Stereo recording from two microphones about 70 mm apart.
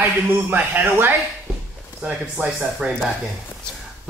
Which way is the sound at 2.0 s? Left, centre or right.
Centre.